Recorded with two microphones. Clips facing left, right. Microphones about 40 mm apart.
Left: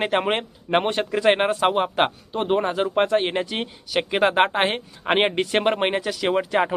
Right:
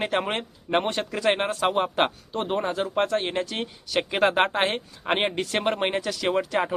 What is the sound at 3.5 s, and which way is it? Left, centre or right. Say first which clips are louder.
Speech: left 2 dB; centre.